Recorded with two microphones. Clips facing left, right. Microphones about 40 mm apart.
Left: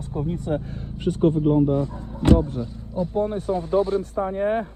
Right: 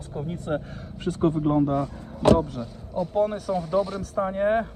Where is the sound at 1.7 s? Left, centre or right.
Right.